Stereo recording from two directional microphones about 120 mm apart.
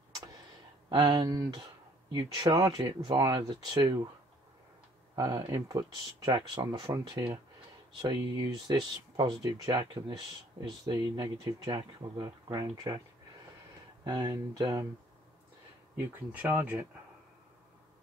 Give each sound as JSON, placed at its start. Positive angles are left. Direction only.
{"t": 0.8, "sound": "speech", "side_deg": -40}
{"t": 5.1, "sound": "speech", "side_deg": -30}
{"t": 8.6, "sound": "speech", "side_deg": -35}
{"t": 14.0, "sound": "speech", "side_deg": -30}
{"t": 16.0, "sound": "speech", "side_deg": -15}